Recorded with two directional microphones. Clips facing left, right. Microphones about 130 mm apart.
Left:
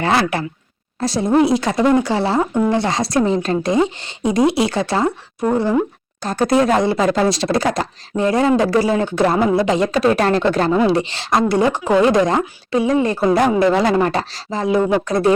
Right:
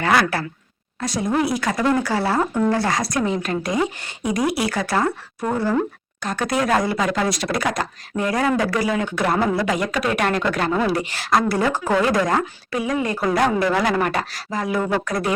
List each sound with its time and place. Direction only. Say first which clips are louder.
0.0 s speech: left 2 dB; 25° left (ahead or behind)
6.2 s speech: left 6 dB; 30° left (ahead or behind)